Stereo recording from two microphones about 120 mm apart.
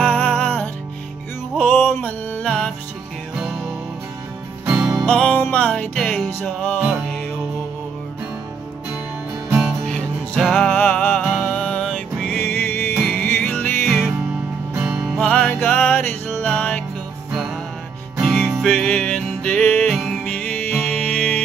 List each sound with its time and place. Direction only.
0.0 s music: 10° left (ahead or behind)
1.8 s music: 15° left (ahead or behind)
4.6 s music: 5° right (ahead or behind)
5.0 s music: 10° left (ahead or behind)
9.8 s music: 5° left (ahead or behind)
12.4 s music: 20° left (ahead or behind)
13.0 s music: 5° left (ahead or behind)
13.3 s music: 15° left (ahead or behind)
13.8 s music: centre (ahead or behind)
15.1 s music: 10° left (ahead or behind)
18.1 s music: centre (ahead or behind)